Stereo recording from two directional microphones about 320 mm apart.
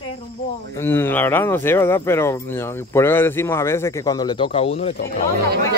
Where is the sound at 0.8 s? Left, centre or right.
Centre.